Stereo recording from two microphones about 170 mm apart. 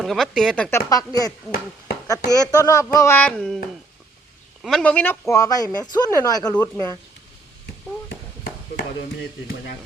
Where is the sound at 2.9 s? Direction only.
15° left (ahead or behind).